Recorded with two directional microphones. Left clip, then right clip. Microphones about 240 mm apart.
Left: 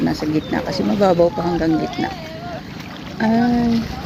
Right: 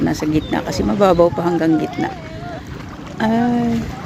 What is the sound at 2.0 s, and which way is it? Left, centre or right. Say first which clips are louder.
Speech: right 1 dB; centre.